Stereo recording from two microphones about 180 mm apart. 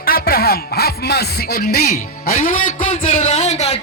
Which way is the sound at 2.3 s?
45° left (ahead or behind).